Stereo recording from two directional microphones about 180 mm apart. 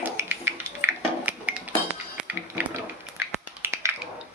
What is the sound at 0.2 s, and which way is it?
Music, 15° right (ahead or behind).